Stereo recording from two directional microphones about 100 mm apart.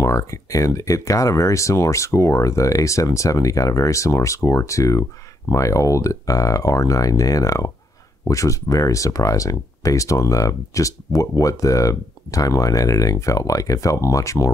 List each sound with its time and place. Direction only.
0.0 s speech: 30° left (ahead or behind)